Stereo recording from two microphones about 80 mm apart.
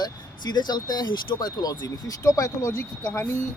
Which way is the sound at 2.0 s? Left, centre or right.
Left.